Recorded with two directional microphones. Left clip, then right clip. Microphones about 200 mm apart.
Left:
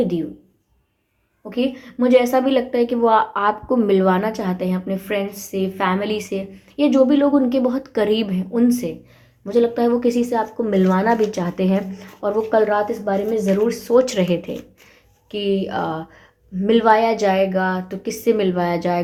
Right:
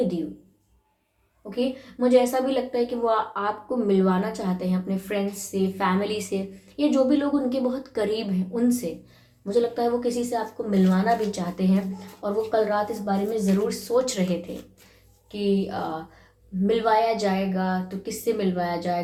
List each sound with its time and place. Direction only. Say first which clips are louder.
1.5 s a woman's voice: left 4 dB; 40° left (ahead or behind)